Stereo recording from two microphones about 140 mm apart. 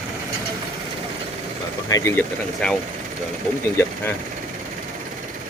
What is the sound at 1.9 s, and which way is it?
Speech, 20° left (ahead or behind).